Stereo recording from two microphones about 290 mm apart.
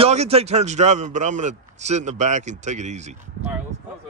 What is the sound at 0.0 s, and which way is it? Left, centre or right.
A man's voice, right.